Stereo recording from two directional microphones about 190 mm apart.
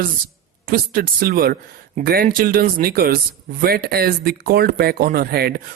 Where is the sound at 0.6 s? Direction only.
50° right (ahead or behind).